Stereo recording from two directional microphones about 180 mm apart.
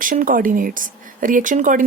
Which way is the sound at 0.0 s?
50° right (ahead or behind).